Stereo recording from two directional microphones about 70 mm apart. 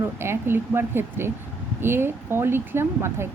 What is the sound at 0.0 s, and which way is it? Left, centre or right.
A woman's voice, right.